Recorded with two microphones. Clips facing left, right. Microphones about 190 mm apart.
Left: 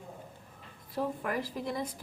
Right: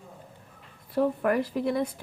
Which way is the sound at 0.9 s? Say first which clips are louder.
Right 8 dB; 65° right (ahead or behind).